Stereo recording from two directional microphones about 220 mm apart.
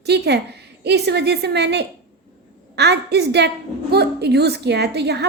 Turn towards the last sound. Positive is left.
turn(degrees=-50)  # may be behind; listen again after turning